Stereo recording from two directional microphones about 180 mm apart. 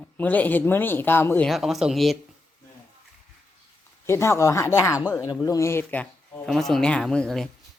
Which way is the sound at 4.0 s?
15° left (ahead or behind).